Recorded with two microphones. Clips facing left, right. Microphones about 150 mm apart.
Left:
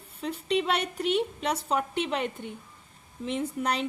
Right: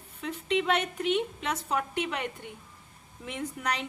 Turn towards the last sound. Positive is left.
turn(degrees=30)  # may be behind; listen again after turning